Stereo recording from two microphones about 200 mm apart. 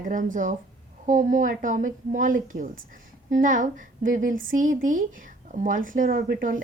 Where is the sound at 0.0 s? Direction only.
40° right (ahead or behind).